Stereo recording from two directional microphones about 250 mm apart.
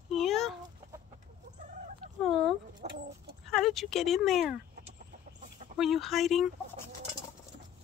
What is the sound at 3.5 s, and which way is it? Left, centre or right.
Speech, centre.